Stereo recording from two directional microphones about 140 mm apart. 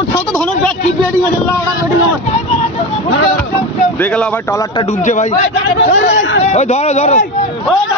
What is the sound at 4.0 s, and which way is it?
Speech, 10° left (ahead or behind).